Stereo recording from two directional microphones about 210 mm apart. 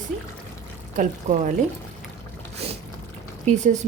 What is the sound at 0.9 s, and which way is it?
Speech, 35° right (ahead or behind).